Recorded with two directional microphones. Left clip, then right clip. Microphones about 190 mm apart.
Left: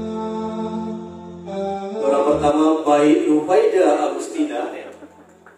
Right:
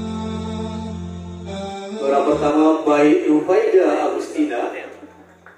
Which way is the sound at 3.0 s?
20° left (ahead or behind).